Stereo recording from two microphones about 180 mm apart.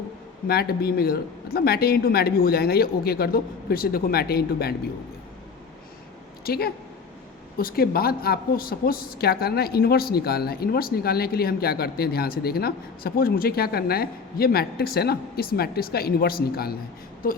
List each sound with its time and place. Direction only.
0.4 s a woman's voice: 60° left (ahead or behind)
6.4 s a woman's voice: 60° left (ahead or behind)